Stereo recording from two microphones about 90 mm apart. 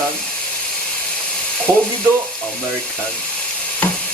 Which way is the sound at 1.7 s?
35° right (ahead or behind).